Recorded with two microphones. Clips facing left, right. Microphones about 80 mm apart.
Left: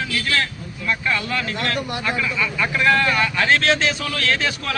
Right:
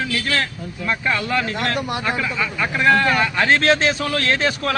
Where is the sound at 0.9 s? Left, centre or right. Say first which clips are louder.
Right 1 dB; right.